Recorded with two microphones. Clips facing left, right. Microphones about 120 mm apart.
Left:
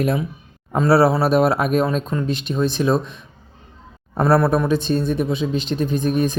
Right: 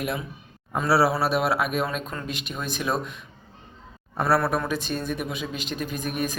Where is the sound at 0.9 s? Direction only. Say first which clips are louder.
Left 6 dB; 45° left (ahead or behind); by 3.2 s 30° left (ahead or behind).